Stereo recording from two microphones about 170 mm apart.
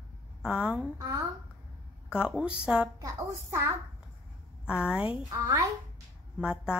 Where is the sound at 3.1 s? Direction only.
15° right (ahead or behind).